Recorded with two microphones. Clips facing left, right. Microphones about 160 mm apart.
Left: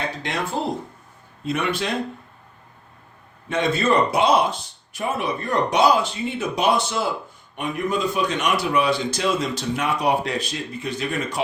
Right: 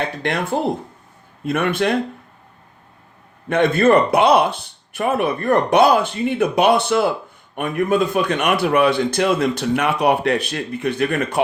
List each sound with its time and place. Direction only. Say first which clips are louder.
0.5 s a man's voice: right 5 dB; 60° right (ahead or behind)
3.5 s a man's voice: right 6 dB; 55° right (ahead or behind)